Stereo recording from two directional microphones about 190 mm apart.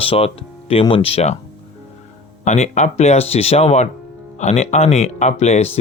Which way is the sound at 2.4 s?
35° left (ahead or behind).